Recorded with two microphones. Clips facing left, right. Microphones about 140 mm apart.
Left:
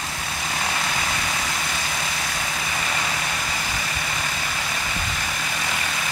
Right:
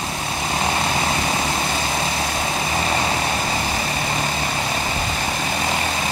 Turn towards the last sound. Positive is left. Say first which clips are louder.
# right 6 dB
turn(degrees=-30)  # may be behind; listen again after turning